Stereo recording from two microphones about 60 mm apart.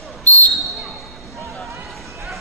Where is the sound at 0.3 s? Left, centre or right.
Left.